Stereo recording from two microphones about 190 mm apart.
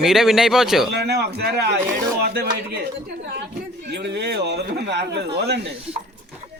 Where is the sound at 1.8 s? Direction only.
10° right (ahead or behind).